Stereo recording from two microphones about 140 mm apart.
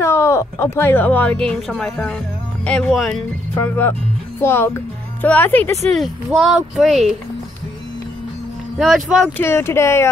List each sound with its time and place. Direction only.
0.0 s a child's voice: 20° left (ahead or behind); by 3.2 s 5° left (ahead or behind)
3.5 s speech: 15° left (ahead or behind)
5.9 s a child's voice: centre (ahead or behind)
8.7 s speech: 5° right (ahead or behind)
9.4 s speech: 15° left (ahead or behind)